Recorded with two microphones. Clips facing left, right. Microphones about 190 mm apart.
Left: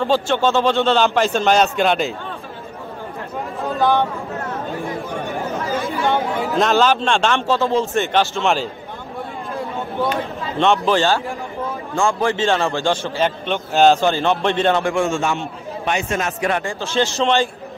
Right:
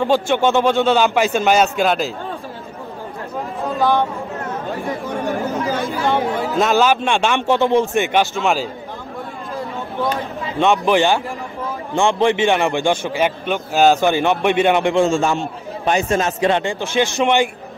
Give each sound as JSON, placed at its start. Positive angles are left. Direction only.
{"t": 0.0, "sound": "a man's voice", "side_deg": -15}
{"t": 6.0, "sound": "a man's voice", "side_deg": 0}
{"t": 10.6, "sound": "a man's voice", "side_deg": -10}